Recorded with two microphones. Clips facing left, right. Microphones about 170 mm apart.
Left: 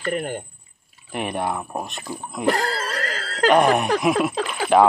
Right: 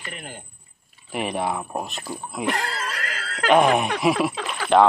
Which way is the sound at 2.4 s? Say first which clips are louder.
Left 5 dB; 35° left (ahead or behind).